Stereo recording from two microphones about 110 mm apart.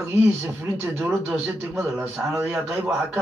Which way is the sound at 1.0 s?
5° right (ahead or behind).